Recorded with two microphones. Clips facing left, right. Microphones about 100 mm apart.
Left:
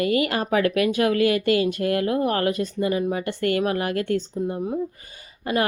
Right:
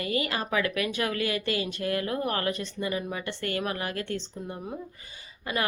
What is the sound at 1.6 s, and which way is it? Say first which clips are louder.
Speech: left 7 dB; 45° left (ahead or behind).